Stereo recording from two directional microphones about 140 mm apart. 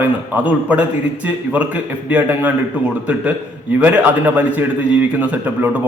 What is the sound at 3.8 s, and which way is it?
A man's voice, 10° right (ahead or behind).